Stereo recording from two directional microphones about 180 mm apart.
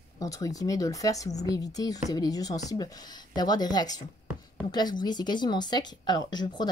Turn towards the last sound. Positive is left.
turn(degrees=25)  # may be behind; listen again after turning